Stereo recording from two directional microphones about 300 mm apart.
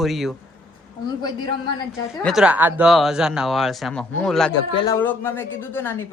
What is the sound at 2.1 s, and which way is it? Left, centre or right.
Speech, centre.